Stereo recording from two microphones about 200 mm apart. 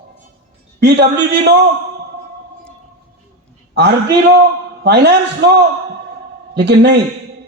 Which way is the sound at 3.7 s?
55° right (ahead or behind).